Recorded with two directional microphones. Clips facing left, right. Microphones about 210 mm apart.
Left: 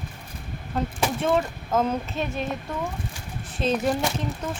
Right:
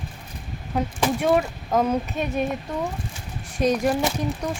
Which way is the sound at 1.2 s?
15° right (ahead or behind).